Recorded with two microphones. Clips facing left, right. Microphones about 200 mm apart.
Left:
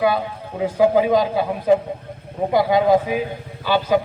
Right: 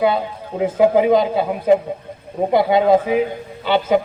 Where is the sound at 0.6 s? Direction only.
20° right (ahead or behind).